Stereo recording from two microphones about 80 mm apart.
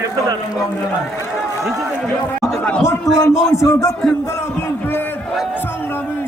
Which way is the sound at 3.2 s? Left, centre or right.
Left.